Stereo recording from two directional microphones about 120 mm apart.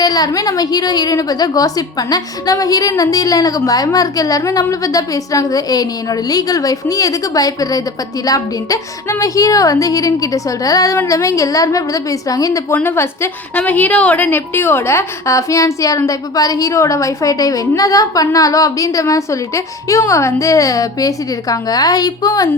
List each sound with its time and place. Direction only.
0.0 s a woman's voice: 35° left (ahead or behind)
12.7 s a woman's voice: 20° left (ahead or behind)